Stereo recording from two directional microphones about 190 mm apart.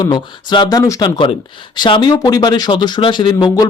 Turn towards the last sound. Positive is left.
turn(degrees=20)  # may be behind; listen again after turning